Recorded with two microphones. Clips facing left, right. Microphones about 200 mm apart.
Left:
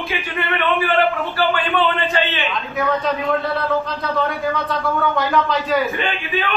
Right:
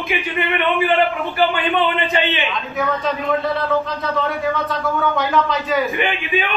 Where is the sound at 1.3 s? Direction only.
15° right (ahead or behind).